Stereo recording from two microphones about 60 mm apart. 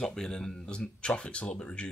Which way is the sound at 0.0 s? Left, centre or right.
Centre.